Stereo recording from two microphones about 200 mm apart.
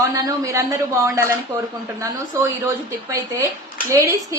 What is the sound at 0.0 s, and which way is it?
A woman's voice, 15° right (ahead or behind).